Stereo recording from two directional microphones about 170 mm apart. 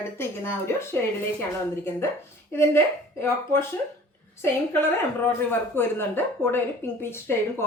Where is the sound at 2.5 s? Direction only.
15° left (ahead or behind).